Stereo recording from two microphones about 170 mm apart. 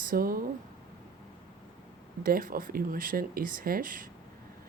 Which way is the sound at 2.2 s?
60° right (ahead or behind).